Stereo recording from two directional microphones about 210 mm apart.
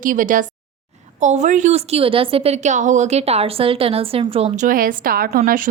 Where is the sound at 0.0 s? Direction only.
40° right (ahead or behind).